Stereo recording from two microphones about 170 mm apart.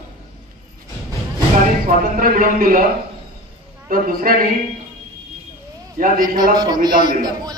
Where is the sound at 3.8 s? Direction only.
55° right (ahead or behind).